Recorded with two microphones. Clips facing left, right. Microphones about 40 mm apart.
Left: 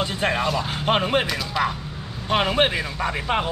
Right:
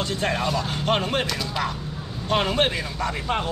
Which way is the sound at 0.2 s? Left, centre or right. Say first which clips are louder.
Left 2 dB; centre.